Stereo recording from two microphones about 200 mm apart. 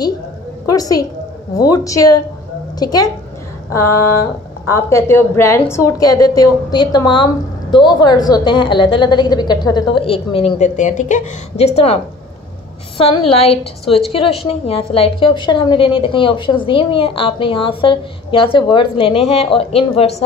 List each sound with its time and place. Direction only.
0.7 s a woman's voice: 20° left (ahead or behind)
4.6 s a woman's voice: 15° left (ahead or behind)